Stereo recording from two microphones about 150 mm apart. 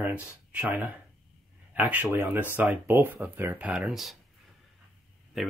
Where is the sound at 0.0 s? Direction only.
10° right (ahead or behind).